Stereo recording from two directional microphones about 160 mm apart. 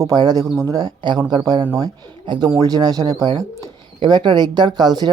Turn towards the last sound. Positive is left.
turn(degrees=-25)  # may be behind; listen again after turning